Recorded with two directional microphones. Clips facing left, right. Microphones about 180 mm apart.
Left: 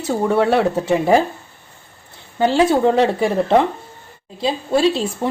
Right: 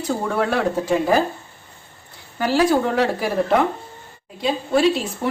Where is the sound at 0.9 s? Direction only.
25° left (ahead or behind).